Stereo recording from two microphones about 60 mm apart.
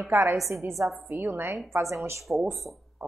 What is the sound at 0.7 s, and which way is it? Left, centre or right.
Speech, centre.